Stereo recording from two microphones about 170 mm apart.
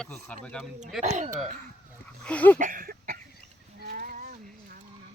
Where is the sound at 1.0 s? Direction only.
45° right (ahead or behind).